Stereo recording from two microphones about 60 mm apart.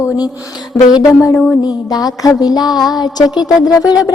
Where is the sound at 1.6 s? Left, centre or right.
Left.